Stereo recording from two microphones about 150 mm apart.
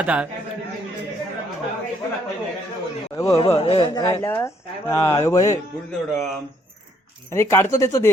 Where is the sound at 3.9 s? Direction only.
20° left (ahead or behind).